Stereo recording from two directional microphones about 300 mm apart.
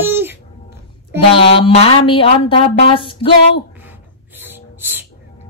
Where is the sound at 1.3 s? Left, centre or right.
Centre.